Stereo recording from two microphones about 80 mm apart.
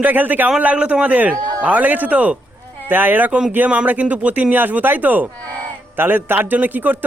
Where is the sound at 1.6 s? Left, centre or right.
Centre.